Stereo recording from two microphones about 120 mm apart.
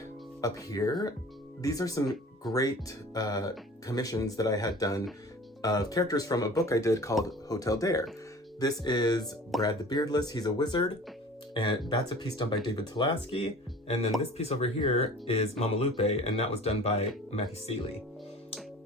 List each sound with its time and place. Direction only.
0.4 s speech: 30° left (ahead or behind)
13.3 s speech: 55° left (ahead or behind)